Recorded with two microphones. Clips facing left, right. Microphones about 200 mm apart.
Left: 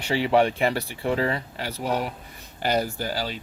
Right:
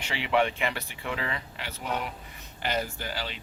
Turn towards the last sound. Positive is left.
turn(degrees=40)  # may be behind; listen again after turning